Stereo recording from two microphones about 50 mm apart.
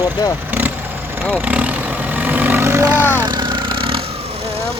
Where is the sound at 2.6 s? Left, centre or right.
Right.